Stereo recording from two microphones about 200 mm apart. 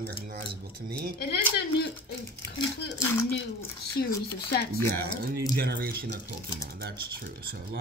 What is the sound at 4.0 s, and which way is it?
Speech, 50° left (ahead or behind).